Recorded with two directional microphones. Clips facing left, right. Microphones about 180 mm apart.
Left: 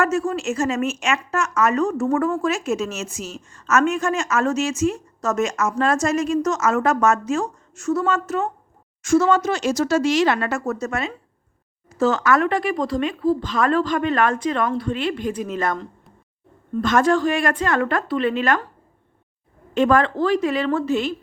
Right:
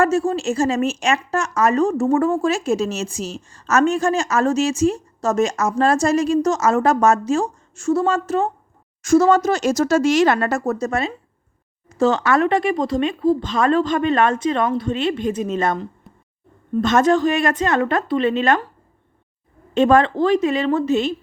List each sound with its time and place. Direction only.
0.0 s a woman's voice: 30° right (ahead or behind)
16.8 s a woman's voice: 20° right (ahead or behind)
19.7 s a woman's voice: 25° right (ahead or behind)